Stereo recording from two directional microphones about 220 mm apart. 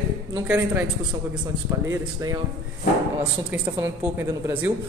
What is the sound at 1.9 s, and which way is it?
Speech, 15° right (ahead or behind).